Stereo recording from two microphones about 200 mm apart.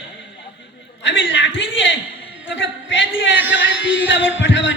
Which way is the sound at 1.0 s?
65° left (ahead or behind).